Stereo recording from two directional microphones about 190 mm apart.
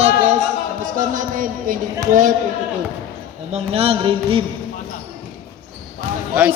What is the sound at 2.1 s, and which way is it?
Speech, 45° right (ahead or behind).